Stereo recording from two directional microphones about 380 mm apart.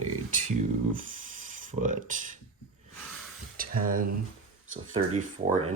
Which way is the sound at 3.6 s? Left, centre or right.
Right.